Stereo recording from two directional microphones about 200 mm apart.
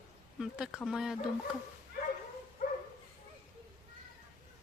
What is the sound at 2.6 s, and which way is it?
Dog, 40° left (ahead or behind).